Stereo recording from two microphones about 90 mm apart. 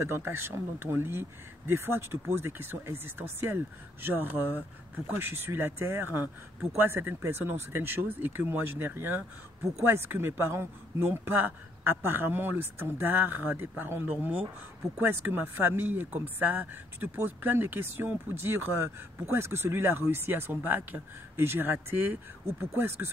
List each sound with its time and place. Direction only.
0.0 s speech: 25° right (ahead or behind)